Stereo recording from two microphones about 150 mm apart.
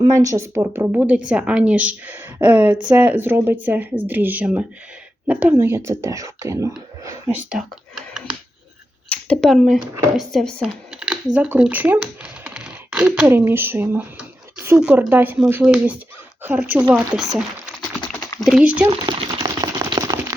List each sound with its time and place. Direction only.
0.0 s a woman's voice: 25° right (ahead or behind)
7.0 s whispering: 20° right (ahead or behind)
7.5 s speech: 5° right (ahead or behind)
9.0 s speech: 5° left (ahead or behind)
10.9 s computer keyboard: 5° right (ahead or behind)
11.3 s a woman's voice: 10° right (ahead or behind)
18.4 s a woman's voice: 5° right (ahead or behind)
18.9 s a sound: 35° right (ahead or behind)